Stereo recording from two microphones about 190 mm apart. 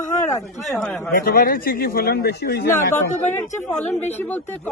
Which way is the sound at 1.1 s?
50° left (ahead or behind).